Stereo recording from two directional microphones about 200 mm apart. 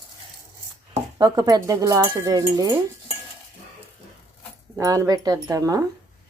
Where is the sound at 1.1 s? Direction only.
20° right (ahead or behind).